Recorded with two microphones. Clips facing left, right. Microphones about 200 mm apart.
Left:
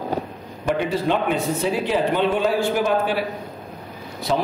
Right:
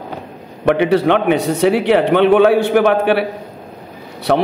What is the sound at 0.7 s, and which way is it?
A man's voice, 70° right (ahead or behind).